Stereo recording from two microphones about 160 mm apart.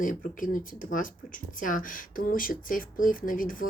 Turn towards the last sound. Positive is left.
turn(degrees=60)  # may be behind; listen again after turning